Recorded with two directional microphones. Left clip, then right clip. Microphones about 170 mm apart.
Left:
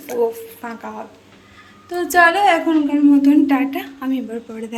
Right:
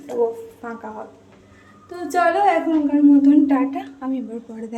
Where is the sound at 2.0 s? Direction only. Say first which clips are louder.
Left 4 dB; centre (ahead or behind).